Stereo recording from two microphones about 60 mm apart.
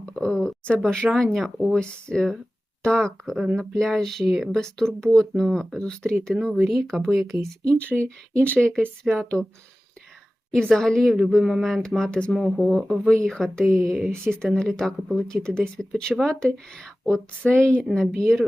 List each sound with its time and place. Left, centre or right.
0.0 s a sound: centre
0.7 s a woman's voice: centre
6.3 s speech: centre
7.6 s a woman's voice: left
9.0 s speech: centre
10.5 s a woman's voice: centre
12.3 s speech: centre
13.1 s a woman's voice: centre